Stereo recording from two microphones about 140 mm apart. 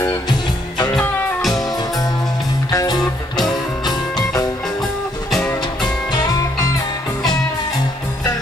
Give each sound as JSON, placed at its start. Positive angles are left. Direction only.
{"t": 0.3, "sound": "music", "side_deg": 30}
{"t": 0.9, "sound": "music", "side_deg": 5}
{"t": 1.5, "sound": "music", "side_deg": 25}
{"t": 3.0, "sound": "music", "side_deg": 0}
{"t": 3.8, "sound": "music", "side_deg": 30}
{"t": 6.1, "sound": "music", "side_deg": 25}